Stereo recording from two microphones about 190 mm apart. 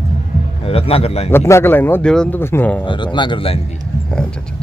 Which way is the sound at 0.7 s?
30° left (ahead or behind).